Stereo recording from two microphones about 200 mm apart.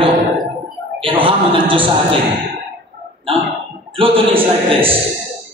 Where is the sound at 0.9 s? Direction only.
25° right (ahead or behind).